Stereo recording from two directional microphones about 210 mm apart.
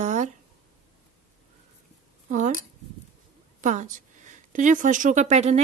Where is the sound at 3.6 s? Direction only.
35° right (ahead or behind).